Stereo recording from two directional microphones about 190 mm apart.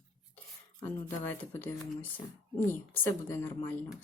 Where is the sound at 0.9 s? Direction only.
10° left (ahead or behind).